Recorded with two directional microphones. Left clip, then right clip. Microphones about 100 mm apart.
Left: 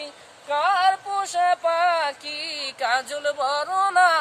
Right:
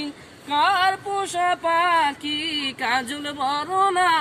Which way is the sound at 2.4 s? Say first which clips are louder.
Even; 40° left (ahead or behind).